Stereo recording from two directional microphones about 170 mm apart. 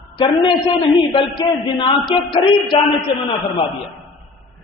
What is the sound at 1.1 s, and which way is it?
A man's voice, 30° left (ahead or behind).